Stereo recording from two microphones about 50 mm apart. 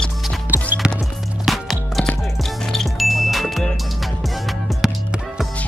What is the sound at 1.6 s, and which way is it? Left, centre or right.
Music, centre.